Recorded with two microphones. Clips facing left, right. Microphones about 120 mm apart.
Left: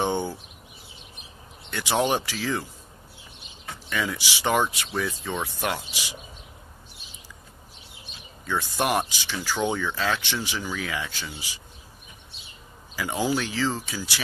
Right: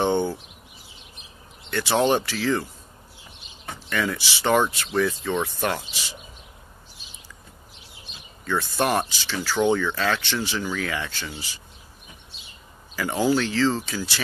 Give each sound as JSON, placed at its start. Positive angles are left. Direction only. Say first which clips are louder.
{"t": 0.0, "sound": "speech", "louder": "right 4 dB", "side_deg": 10}
{"t": 1.7, "sound": "speech", "louder": "right 3 dB", "side_deg": 10}
{"t": 3.9, "sound": "speech", "louder": "right 3 dB", "side_deg": 10}
{"t": 8.5, "sound": "speech", "louder": "right 2 dB", "side_deg": 15}
{"t": 12.9, "sound": "speech", "louder": "right 4 dB", "side_deg": 10}